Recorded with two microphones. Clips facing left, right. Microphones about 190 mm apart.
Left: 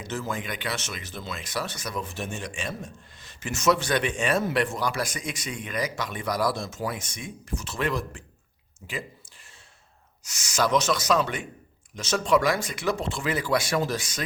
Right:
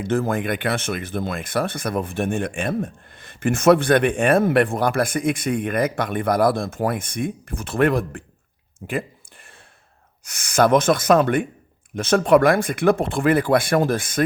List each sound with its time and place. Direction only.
0.0 s speech: 55° right (ahead or behind)
8.9 s a sound: 55° right (ahead or behind)
10.2 s speech: 55° right (ahead or behind)